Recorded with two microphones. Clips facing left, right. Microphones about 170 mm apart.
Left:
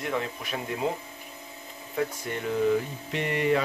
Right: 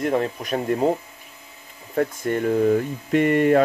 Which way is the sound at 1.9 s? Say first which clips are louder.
Right 8 dB; 50° right (ahead or behind).